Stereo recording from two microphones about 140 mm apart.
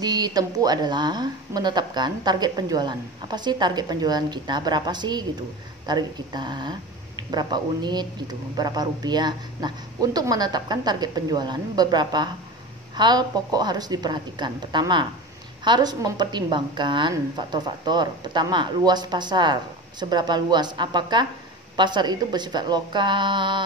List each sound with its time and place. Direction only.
0.0 s speech: 30° right (ahead or behind)